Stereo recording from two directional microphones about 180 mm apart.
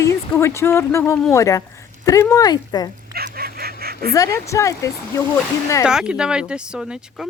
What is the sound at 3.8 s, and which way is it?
Honk, 60° right (ahead or behind).